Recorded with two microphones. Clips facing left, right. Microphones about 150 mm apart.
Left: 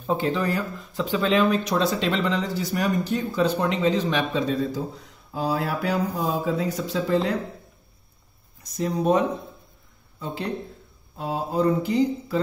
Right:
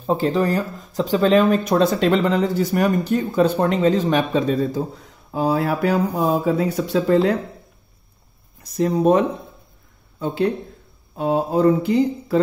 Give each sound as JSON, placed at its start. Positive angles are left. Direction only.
{"t": 0.0, "sound": "speech", "side_deg": -35}
{"t": 8.7, "sound": "speech", "side_deg": -60}